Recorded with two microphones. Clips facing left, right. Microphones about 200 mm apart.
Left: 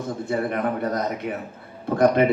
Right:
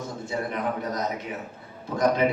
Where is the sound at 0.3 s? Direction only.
60° left (ahead or behind).